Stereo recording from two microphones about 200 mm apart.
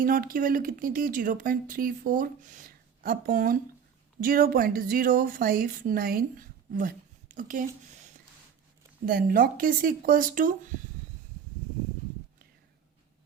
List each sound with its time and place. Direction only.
0.0 s speech: 45° right (ahead or behind)
9.0 s speech: 45° right (ahead or behind)